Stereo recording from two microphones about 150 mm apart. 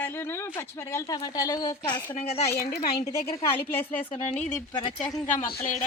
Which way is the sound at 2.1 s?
45° left (ahead or behind).